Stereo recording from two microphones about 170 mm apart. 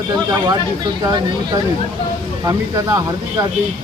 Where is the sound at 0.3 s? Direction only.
25° right (ahead or behind).